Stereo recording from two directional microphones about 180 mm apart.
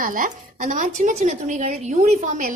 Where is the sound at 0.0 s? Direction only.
50° right (ahead or behind).